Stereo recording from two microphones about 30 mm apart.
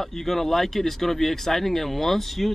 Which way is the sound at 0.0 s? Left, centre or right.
Centre.